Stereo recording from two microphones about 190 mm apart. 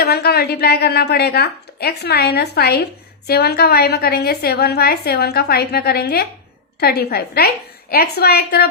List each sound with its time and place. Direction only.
0.0 s a woman's voice: 55° left (ahead or behind)